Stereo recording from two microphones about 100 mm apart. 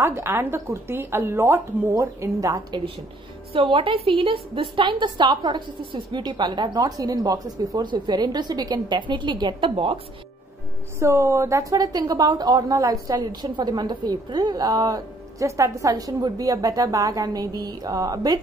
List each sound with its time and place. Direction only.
0.0 s speech: 25° right (ahead or behind)
3.5 s a woman's voice: 60° right (ahead or behind)
11.0 s a woman's voice: 30° right (ahead or behind)